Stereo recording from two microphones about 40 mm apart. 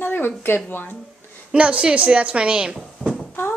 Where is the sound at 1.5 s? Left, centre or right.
Right.